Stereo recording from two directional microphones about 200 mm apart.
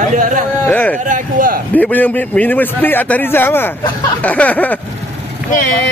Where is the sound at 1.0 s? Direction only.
40° right (ahead or behind).